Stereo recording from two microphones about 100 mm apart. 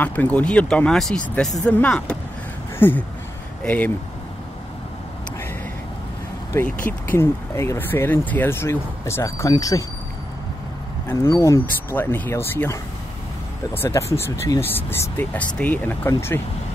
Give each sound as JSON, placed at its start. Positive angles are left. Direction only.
{"t": 0.0, "sound": "speech", "side_deg": 15}
{"t": 6.6, "sound": "speech", "side_deg": 20}
{"t": 11.1, "sound": "speech", "side_deg": 30}
{"t": 13.8, "sound": "speech", "side_deg": 30}